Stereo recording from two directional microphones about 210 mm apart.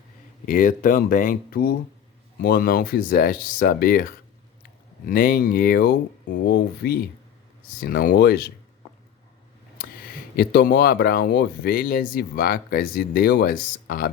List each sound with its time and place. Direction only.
0.4 s speech: 40° left (ahead or behind)
10.3 s speech: 45° left (ahead or behind)